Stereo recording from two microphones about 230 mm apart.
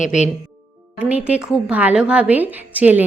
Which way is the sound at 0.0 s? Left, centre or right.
Left.